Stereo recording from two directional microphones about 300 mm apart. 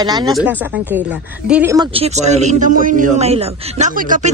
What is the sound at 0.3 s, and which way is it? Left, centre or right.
Speech, centre.